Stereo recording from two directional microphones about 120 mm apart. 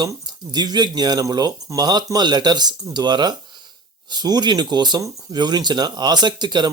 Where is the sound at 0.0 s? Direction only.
35° right (ahead or behind).